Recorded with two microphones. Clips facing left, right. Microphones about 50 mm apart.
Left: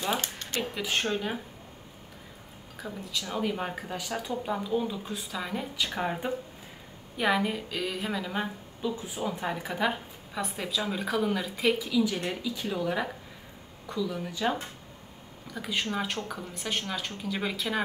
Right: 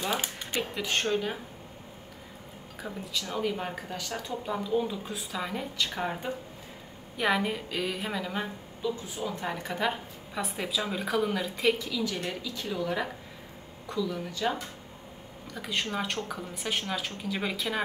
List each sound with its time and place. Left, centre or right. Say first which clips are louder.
0.2 s speech: right 1 dB; centre
0.7 s a woman's voice: right 1 dB; centre
2.8 s a woman's voice: even; centre
8.9 s speech: left 2 dB; centre
9.5 s a woman's voice: even; centre